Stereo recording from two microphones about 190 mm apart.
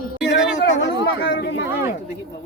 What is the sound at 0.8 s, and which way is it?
Speech, 65° left (ahead or behind).